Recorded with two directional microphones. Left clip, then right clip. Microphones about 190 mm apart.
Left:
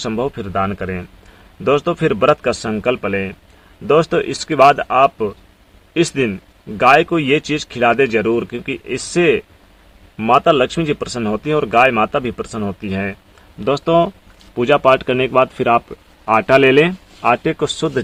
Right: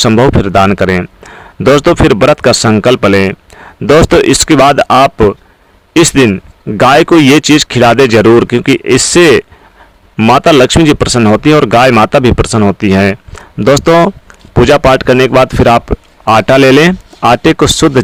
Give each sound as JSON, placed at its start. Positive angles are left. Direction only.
{"t": 0.0, "sound": "speech", "side_deg": -55}